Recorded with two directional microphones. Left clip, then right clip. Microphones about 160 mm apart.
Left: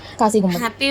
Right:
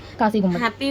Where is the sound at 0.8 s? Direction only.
65° left (ahead or behind).